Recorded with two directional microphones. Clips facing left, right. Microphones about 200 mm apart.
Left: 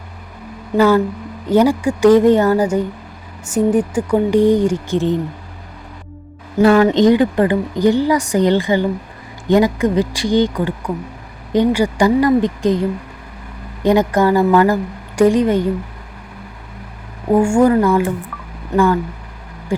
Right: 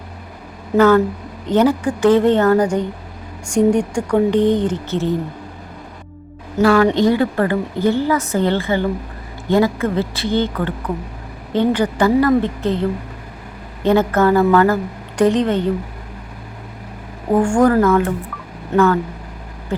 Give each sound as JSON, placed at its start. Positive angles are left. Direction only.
{"t": 0.8, "sound": "a woman's voice", "side_deg": 10}
{"t": 6.6, "sound": "a woman's voice", "side_deg": 20}
{"t": 13.8, "sound": "a woman's voice", "side_deg": 15}
{"t": 17.3, "sound": "a woman's voice", "side_deg": 10}